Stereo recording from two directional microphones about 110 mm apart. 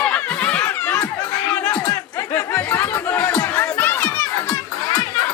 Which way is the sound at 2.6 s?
20° left (ahead or behind).